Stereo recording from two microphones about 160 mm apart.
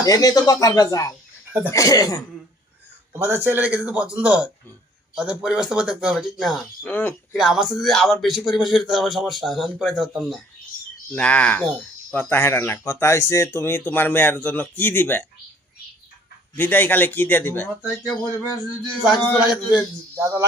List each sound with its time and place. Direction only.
0.0 s speech: 20° left (ahead or behind)
3.1 s a man's voice: 15° right (ahead or behind)
6.8 s speech: 10° left (ahead or behind)
7.3 s a man's voice: 5° right (ahead or behind); by 15.3 s 10° left (ahead or behind)
16.6 s speech: 10° left (ahead or behind)
19.1 s speech: 25° left (ahead or behind)
20.2 s a man's voice: 10° right (ahead or behind)